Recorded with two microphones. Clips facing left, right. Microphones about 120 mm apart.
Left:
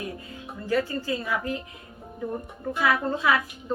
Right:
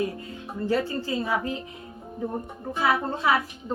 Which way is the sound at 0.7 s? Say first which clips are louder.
Left 1 dB; 30° right (ahead or behind).